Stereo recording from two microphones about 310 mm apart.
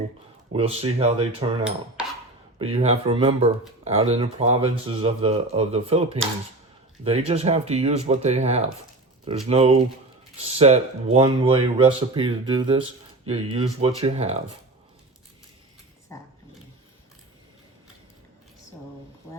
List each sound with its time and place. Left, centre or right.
0.5 s speech: centre
2.6 s speech: centre
16.1 s dog: centre